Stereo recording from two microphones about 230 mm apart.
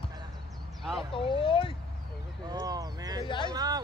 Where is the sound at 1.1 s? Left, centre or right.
Left.